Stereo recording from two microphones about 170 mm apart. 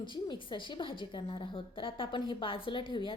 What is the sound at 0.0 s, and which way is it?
A woman's voice, 30° left (ahead or behind).